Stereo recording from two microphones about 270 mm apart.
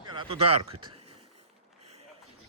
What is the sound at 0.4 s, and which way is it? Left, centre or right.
Speech, right.